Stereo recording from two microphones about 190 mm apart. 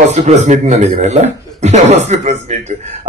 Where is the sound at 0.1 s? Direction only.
35° right (ahead or behind).